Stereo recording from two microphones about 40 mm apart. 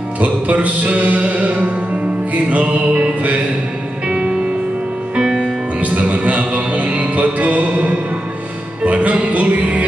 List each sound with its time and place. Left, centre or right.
0.2 s music: right
5.1 s music: centre
5.8 s music: right